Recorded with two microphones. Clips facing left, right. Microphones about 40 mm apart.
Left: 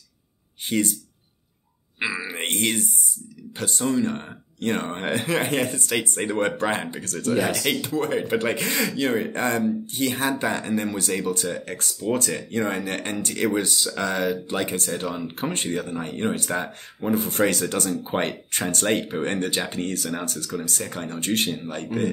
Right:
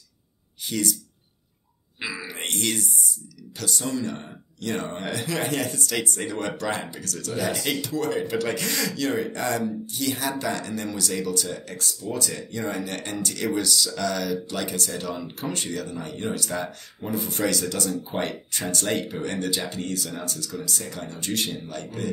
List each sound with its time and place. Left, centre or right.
0.7 s speech: left
2.0 s speech: left